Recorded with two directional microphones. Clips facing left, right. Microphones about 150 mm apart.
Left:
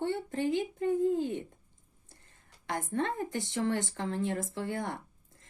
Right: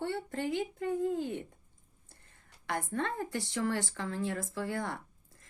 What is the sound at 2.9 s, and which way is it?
Speech, 20° left (ahead or behind).